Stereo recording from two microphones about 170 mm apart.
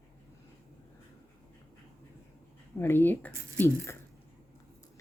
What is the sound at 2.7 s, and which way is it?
Speech, 15° left (ahead or behind).